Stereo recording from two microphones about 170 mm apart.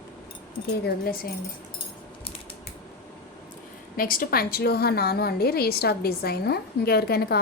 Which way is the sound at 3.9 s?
55° left (ahead or behind).